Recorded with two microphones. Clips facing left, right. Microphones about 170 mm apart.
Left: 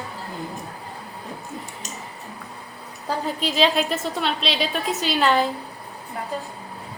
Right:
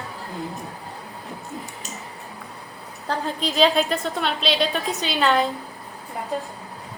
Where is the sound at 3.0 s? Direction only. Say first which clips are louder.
Even; 5° left (ahead or behind).